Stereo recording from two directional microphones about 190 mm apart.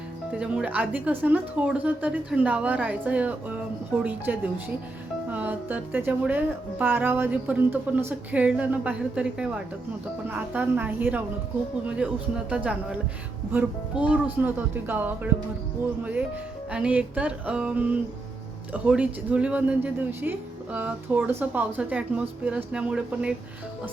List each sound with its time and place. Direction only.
0.3 s speech: 5° right (ahead or behind)
12.5 s speech: 5° right (ahead or behind)
16.7 s speech: 5° right (ahead or behind)